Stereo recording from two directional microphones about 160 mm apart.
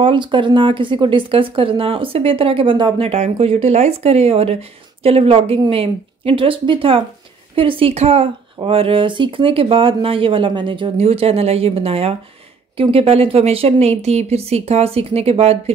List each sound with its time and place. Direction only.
0.0 s speech: 30° right (ahead or behind)